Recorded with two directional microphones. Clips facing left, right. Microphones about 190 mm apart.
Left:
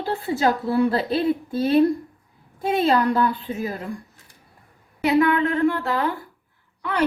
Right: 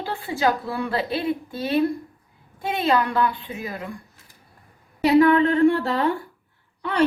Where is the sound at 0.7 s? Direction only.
35° left (ahead or behind).